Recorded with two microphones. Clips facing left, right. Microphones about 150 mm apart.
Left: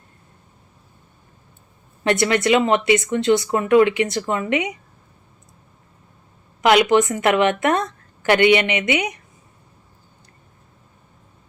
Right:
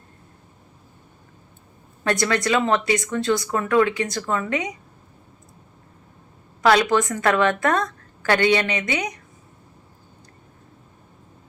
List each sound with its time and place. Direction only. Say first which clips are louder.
2.0 s a woman's voice: left 4 dB; 20° left (ahead or behind)
6.6 s a woman's voice: left 3 dB; 20° left (ahead or behind)